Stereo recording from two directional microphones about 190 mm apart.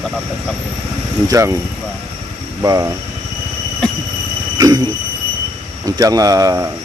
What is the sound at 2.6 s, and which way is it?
Speech, 15° right (ahead or behind).